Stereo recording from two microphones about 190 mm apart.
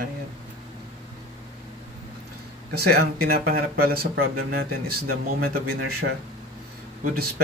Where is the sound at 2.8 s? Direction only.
55° right (ahead or behind).